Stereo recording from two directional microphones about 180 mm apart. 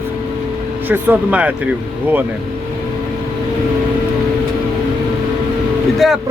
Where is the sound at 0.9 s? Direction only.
10° right (ahead or behind).